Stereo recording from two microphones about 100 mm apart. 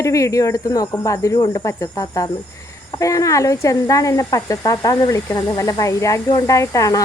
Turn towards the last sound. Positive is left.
turn(degrees=35)  # may be behind; listen again after turning